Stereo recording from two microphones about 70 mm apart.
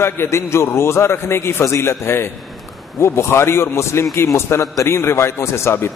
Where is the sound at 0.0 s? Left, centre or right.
Left.